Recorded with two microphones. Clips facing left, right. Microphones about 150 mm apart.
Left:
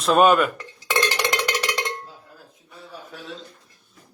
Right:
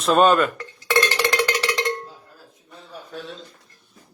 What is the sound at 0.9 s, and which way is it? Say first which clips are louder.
Cowbell: right 3 dB; 15° left (ahead or behind).